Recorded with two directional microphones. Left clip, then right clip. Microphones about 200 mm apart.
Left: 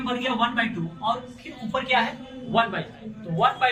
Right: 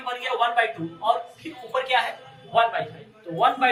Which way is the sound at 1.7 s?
20° left (ahead or behind).